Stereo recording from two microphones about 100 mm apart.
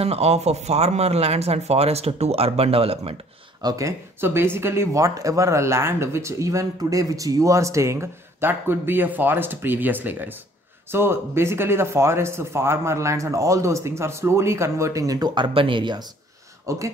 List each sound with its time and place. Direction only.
0.0 s speech: 90° right
3.6 s speech: 30° right (ahead or behind); by 16.1 s 50° right (ahead or behind)
16.6 s speech: 30° right (ahead or behind)